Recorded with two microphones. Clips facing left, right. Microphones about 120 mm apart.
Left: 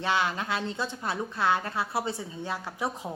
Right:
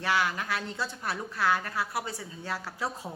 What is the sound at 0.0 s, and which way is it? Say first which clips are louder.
A woman's voice: left 1 dB; 20° left (ahead or behind).